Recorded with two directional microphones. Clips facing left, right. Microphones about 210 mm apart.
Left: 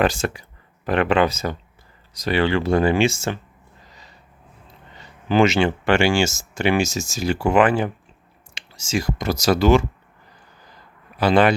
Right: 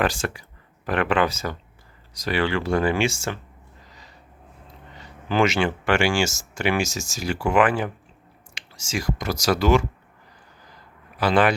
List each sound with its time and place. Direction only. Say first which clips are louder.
0.0 s speech: left 4 dB; 20° left (ahead or behind)
5.3 s speech: left 4 dB; 25° left (ahead or behind)
11.2 s speech: left 3 dB; 25° left (ahead or behind)